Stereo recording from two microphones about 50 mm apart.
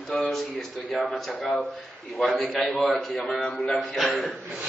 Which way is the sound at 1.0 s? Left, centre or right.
Centre.